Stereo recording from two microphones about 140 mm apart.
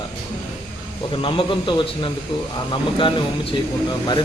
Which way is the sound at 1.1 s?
35° left (ahead or behind).